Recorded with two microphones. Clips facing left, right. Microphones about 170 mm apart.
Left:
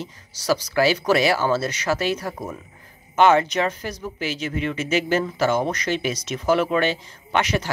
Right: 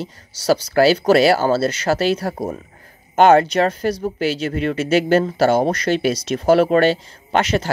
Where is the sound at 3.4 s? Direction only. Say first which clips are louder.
Right 6 dB; 35° right (ahead or behind).